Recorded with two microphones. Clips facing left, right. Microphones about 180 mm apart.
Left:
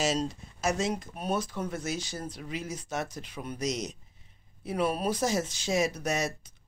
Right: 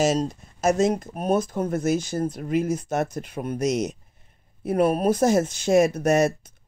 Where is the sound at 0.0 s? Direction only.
45° right (ahead or behind).